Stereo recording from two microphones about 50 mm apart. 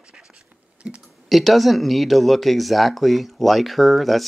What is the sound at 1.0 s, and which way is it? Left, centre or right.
Speech, centre.